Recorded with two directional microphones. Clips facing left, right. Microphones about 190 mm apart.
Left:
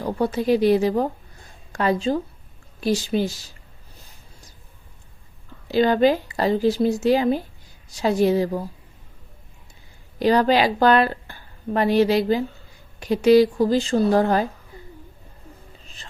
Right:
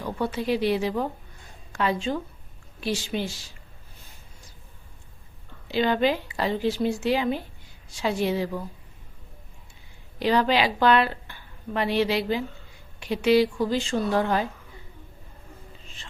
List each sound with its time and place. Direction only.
0.0 s speech: 40° left (ahead or behind)
5.6 s speech: 40° left (ahead or behind)
10.2 s a woman's voice: 40° left (ahead or behind)
16.0 s whispering: 40° left (ahead or behind)